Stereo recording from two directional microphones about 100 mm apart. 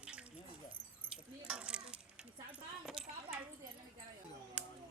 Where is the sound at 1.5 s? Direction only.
10° right (ahead or behind).